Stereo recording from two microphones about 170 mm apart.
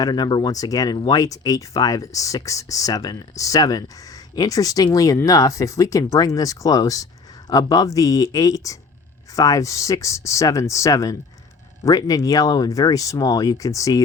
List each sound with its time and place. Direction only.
0.0 s speech: 25° left (ahead or behind)